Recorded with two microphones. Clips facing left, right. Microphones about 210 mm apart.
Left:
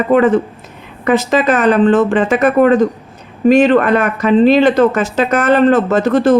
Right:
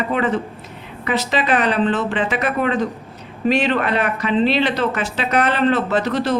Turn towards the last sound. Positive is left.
turn(degrees=50)  # may be behind; listen again after turning